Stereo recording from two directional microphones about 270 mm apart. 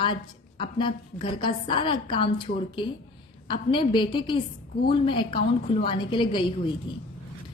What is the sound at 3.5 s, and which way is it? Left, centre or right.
A woman's voice, centre.